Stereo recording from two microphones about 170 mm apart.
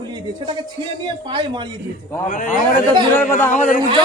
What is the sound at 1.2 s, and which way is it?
Speech, 30° right (ahead or behind).